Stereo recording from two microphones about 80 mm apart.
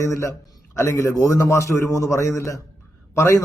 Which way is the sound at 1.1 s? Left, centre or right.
Left.